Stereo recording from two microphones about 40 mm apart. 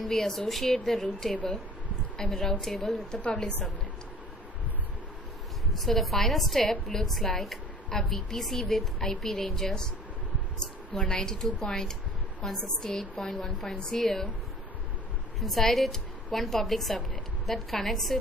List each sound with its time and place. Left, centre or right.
0.0 s a woman's voice: centre
3.3 s a woman's voice: centre
5.7 s a woman's voice: centre
15.4 s a woman's voice: centre